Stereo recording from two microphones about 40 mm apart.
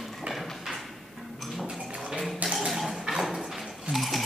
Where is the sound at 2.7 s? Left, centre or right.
Centre.